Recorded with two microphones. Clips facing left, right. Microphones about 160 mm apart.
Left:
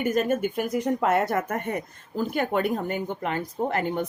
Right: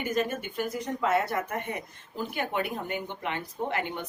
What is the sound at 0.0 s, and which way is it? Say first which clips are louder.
Speech: left 6 dB; 50° left (ahead or behind).